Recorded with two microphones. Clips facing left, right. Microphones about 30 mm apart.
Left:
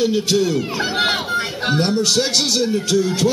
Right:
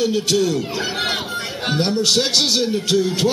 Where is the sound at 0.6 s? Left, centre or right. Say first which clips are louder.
Left 3 dB; centre.